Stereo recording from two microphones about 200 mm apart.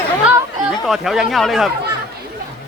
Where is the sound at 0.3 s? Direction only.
Centre (ahead or behind).